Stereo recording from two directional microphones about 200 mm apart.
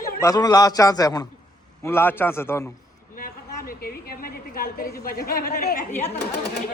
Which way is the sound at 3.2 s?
45° left (ahead or behind).